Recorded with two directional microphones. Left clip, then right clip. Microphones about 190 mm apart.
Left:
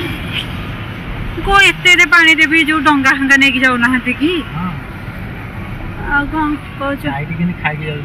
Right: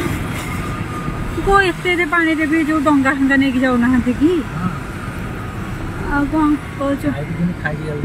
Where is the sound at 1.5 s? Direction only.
25° right (ahead or behind).